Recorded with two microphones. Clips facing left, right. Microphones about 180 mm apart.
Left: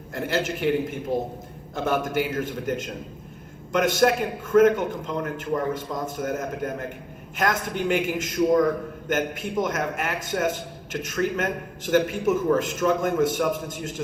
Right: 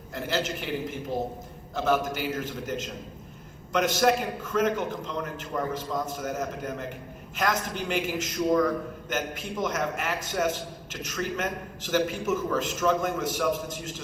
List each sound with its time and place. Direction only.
0.1 s a man's voice: 55° left (ahead or behind)